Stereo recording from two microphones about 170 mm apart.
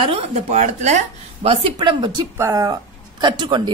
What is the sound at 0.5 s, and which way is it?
A woman's voice, 45° right (ahead or behind).